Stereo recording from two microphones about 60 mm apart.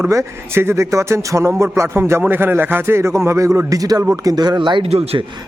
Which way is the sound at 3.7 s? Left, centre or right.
Right.